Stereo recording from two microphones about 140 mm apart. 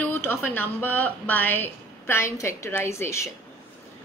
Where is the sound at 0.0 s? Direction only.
15° left (ahead or behind).